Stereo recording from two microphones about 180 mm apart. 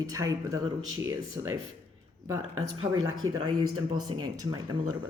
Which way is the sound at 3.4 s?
25° right (ahead or behind).